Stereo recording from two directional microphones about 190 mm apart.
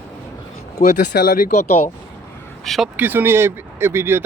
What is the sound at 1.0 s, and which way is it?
Speech, 65° left (ahead or behind).